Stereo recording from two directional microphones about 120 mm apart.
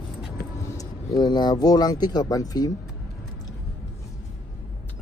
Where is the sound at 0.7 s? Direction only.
30° left (ahead or behind).